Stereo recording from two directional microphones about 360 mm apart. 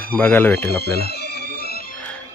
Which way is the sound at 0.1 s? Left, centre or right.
Centre.